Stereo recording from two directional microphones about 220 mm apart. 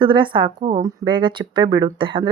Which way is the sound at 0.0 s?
20° right (ahead or behind).